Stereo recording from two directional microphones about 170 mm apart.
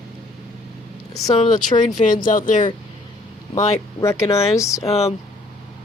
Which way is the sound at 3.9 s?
15° left (ahead or behind).